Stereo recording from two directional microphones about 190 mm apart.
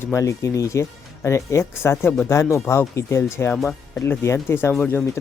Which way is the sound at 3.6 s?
Centre (ahead or behind).